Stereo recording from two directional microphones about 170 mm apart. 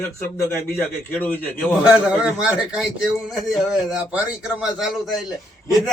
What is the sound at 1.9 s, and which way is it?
A man's voice, 5° right (ahead or behind).